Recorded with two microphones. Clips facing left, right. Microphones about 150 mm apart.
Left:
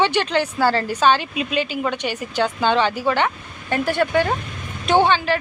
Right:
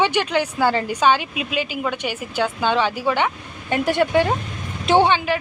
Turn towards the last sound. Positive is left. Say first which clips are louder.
# even
turn(degrees=-20)  # may be behind; listen again after turning